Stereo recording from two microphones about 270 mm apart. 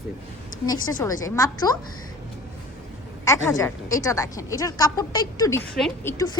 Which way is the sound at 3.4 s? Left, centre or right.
Centre.